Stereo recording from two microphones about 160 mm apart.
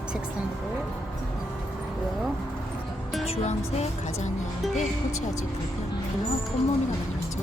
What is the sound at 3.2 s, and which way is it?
Speech, 40° left (ahead or behind).